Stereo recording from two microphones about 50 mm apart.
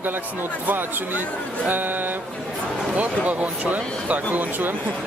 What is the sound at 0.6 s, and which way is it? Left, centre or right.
Speech, right.